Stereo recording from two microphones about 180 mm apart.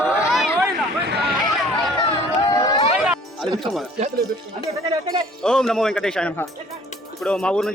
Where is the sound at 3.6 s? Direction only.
Centre (ahead or behind).